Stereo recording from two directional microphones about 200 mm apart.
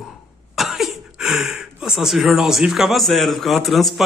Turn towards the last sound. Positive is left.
turn(degrees=0)  # may be behind; listen again after turning